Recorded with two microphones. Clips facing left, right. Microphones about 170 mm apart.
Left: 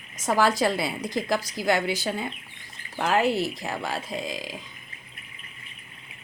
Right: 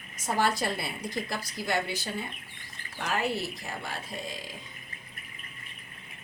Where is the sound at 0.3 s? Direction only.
90° left.